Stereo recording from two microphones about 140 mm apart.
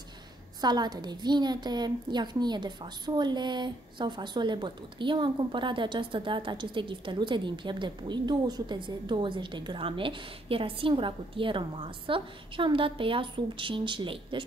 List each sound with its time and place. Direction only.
0.6 s a woman's voice: 30° right (ahead or behind)